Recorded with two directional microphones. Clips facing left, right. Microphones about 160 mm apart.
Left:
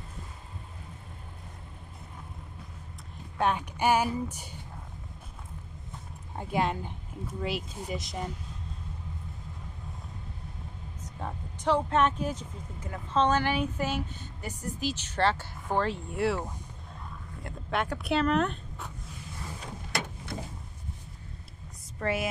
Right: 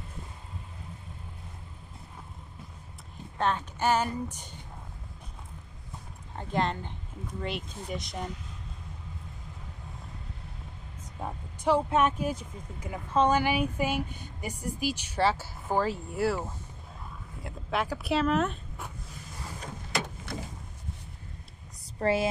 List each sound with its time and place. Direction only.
3.3 s speech: 10° left (ahead or behind)
6.3 s speech: 10° left (ahead or behind)
11.1 s speech: 10° right (ahead or behind)
22.0 s speech: 30° right (ahead or behind)